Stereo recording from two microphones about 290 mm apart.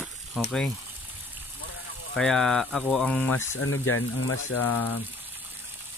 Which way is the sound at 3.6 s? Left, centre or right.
Left.